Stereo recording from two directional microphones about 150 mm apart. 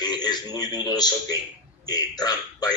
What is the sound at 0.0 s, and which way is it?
A man's voice, 25° left (ahead or behind).